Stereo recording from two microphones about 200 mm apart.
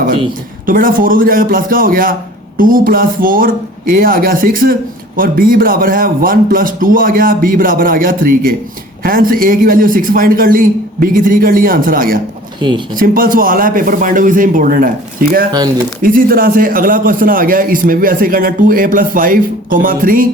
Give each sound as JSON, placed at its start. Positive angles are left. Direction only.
{"t": 0.6, "sound": "speech", "side_deg": -45}
{"t": 12.5, "sound": "speech", "side_deg": -25}
{"t": 13.0, "sound": "speech", "side_deg": -45}
{"t": 16.0, "sound": "speech", "side_deg": -45}